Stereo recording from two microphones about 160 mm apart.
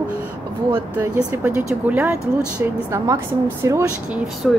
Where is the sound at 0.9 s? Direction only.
15° right (ahead or behind).